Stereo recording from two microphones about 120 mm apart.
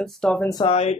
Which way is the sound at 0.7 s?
60° left (ahead or behind).